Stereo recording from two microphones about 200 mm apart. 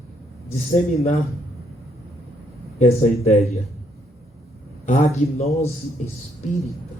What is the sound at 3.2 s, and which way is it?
Speech, 35° left (ahead or behind).